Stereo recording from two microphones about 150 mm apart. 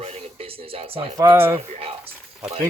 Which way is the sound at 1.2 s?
20° right (ahead or behind).